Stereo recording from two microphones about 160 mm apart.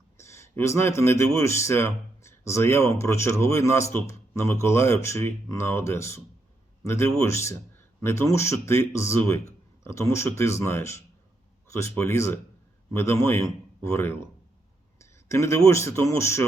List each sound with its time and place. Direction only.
0.2 s speech: 15° left (ahead or behind)